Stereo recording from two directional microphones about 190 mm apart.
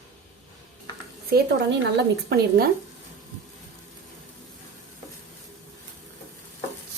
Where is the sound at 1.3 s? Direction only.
65° right (ahead or behind).